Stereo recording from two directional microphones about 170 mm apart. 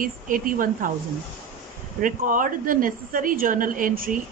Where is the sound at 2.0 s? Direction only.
50° right (ahead or behind).